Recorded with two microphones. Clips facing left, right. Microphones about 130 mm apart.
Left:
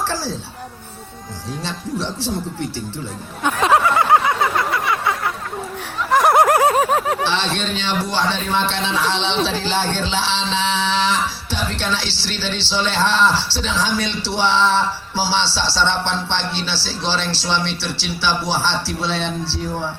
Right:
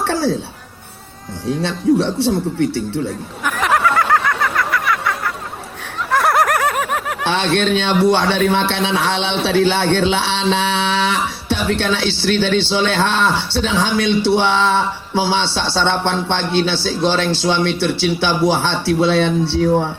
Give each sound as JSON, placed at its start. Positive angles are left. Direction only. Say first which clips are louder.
{"t": 0.1, "sound": "speech", "louder": "right 8 dB", "side_deg": -60}
{"t": 1.6, "sound": "speech", "louder": "right 11 dB", "side_deg": -60}
{"t": 3.4, "sound": "a sound", "louder": "left 1 dB", "side_deg": 25}
{"t": 6.1, "sound": "snicker", "louder": "left 2 dB", "side_deg": 15}
{"t": 7.3, "sound": "a man's voice", "louder": "right 6 dB", "side_deg": -55}